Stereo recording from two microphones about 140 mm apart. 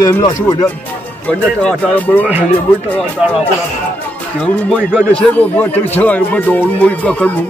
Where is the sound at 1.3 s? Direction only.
10° left (ahead or behind).